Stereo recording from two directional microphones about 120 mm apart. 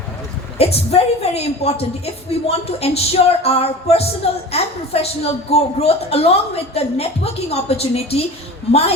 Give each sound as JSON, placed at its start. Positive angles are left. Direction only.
{"t": 0.6, "sound": "speech", "side_deg": 60}